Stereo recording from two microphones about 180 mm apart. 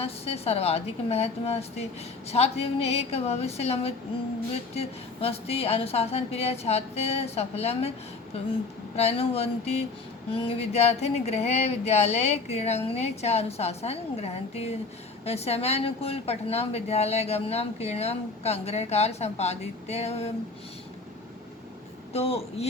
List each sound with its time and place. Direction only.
0.0 s a woman's voice: 35° left (ahead or behind)
9.0 s a woman's voice: 35° left (ahead or behind)
22.1 s a woman's voice: 35° left (ahead or behind)